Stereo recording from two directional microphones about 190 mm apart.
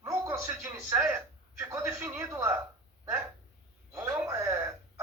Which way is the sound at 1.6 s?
10° right (ahead or behind).